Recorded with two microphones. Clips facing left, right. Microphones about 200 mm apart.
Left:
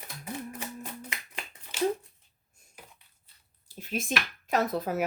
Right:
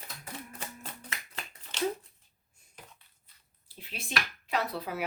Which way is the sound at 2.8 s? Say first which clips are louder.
Even; 5° left (ahead or behind).